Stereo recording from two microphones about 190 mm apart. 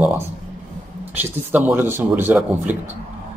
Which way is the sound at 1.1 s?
10° right (ahead or behind).